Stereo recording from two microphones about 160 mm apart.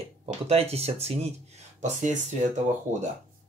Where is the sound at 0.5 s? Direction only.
40° right (ahead or behind).